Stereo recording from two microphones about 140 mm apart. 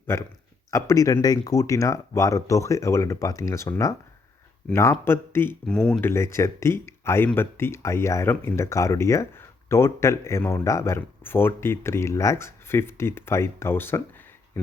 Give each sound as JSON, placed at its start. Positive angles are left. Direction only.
{"t": 0.7, "sound": "speech", "side_deg": 20}
{"t": 6.0, "sound": "speech", "side_deg": 15}